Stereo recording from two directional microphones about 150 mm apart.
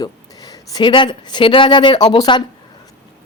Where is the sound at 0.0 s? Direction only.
25° left (ahead or behind).